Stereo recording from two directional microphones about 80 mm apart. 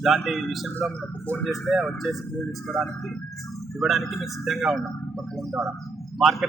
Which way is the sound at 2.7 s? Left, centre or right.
Left.